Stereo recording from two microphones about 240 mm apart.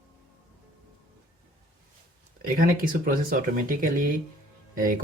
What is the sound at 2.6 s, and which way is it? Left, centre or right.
Speech, right.